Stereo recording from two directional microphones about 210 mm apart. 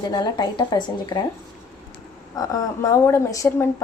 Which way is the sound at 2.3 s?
15° left (ahead or behind).